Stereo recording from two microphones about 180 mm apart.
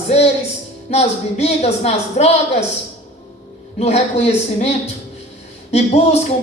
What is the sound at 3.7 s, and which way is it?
Speech, 35° left (ahead or behind).